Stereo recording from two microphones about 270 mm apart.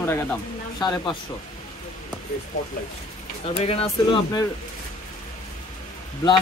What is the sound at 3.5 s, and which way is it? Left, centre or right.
Speech, left.